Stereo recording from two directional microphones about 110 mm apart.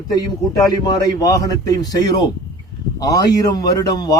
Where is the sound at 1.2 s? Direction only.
35° left (ahead or behind).